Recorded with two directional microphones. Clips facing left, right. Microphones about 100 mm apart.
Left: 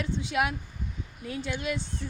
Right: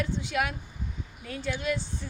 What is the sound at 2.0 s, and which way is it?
Music, 5° left (ahead or behind).